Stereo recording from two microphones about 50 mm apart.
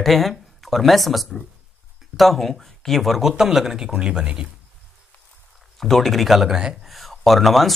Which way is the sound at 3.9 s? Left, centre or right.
Centre.